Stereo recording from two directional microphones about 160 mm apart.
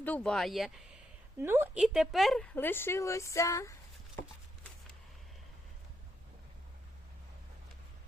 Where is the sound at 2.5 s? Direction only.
15° left (ahead or behind).